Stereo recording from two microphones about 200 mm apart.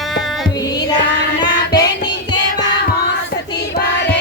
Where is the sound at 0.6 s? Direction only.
20° left (ahead or behind).